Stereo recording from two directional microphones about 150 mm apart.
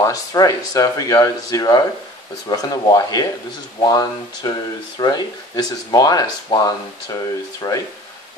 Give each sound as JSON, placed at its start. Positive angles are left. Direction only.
{"t": 0.0, "sound": "speech", "side_deg": 20}